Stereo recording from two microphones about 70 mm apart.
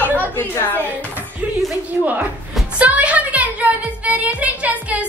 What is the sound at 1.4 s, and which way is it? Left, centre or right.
Music, right.